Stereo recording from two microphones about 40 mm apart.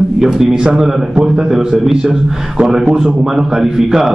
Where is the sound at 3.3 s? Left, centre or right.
Centre.